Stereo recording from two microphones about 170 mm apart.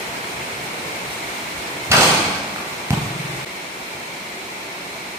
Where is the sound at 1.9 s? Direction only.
15° right (ahead or behind).